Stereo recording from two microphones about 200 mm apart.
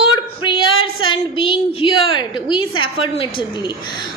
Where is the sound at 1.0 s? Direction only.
25° left (ahead or behind).